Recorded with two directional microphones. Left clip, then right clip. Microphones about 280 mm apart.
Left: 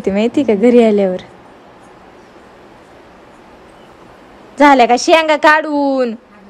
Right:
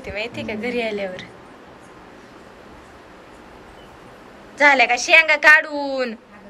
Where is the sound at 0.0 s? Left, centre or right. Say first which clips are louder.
Left 13 dB; centre.